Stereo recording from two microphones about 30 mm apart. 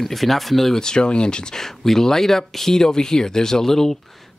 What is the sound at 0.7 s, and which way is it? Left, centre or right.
Speech, left.